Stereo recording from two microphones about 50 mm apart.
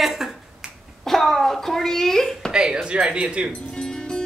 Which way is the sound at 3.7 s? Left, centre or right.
Centre.